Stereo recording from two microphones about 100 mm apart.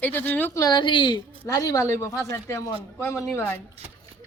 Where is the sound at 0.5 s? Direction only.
35° left (ahead or behind).